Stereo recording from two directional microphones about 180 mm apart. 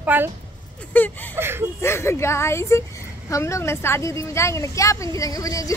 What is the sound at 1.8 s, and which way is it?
A woman's voice, 15° left (ahead or behind).